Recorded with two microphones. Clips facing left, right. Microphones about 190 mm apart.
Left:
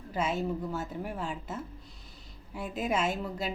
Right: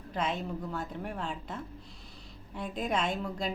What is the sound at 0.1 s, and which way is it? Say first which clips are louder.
A woman's voice: left 3 dB; 5° left (ahead or behind).